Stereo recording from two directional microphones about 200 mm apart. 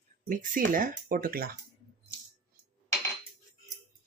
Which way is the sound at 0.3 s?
45° right (ahead or behind).